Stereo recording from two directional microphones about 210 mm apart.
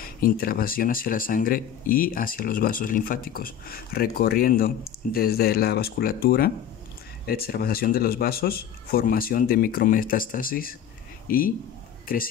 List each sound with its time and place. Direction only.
0.0 s speech: 45° left (ahead or behind)